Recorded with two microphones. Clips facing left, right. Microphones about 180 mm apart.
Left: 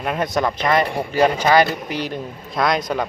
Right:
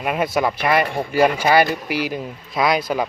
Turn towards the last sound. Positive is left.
turn(degrees=-5)  # may be behind; listen again after turning